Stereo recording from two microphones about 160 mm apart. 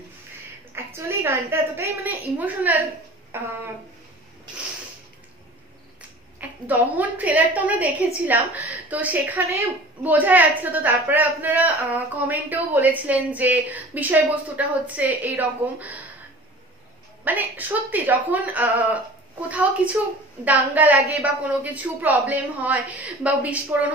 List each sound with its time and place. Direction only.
0.7 s a sound: 15° right (ahead or behind)
2.3 s a woman's voice: 10° right (ahead or behind)
6.7 s a woman's voice: 10° right (ahead or behind)
17.2 s a woman's voice: 10° right (ahead or behind)